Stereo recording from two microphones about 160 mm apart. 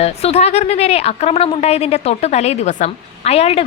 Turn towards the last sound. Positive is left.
turn(degrees=40)  # may be behind; listen again after turning